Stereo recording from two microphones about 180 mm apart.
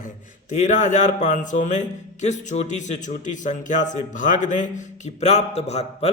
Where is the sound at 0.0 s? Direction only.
45° left (ahead or behind).